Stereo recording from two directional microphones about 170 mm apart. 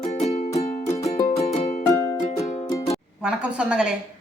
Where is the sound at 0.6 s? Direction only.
40° left (ahead or behind).